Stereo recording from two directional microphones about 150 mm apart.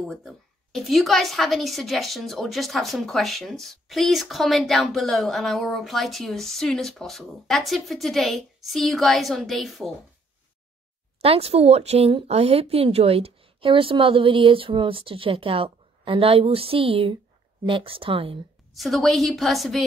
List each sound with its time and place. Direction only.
0.1 s a woman's voice: centre (ahead or behind)
11.1 s speech: 40° right (ahead or behind)
18.8 s a woman's voice: centre (ahead or behind)